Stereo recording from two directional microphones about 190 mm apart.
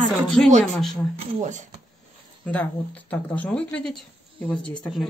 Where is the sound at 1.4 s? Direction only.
40° right (ahead or behind).